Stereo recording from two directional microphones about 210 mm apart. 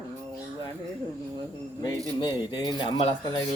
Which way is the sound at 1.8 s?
20° left (ahead or behind).